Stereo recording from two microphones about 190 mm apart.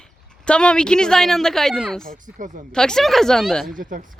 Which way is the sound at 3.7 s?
45° right (ahead or behind).